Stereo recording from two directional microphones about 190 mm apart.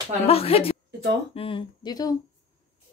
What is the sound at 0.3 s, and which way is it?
Speech, 30° left (ahead or behind).